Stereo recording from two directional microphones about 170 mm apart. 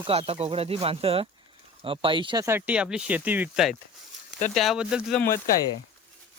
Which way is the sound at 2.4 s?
10° right (ahead or behind).